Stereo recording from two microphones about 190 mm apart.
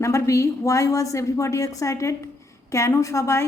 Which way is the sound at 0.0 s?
15° left (ahead or behind).